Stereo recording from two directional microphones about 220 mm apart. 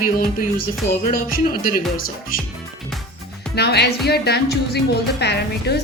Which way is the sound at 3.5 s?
45° left (ahead or behind).